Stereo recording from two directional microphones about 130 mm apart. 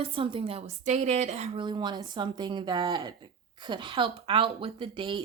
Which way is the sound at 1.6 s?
35° right (ahead or behind).